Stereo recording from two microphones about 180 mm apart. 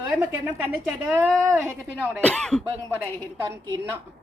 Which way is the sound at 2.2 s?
5° left (ahead or behind).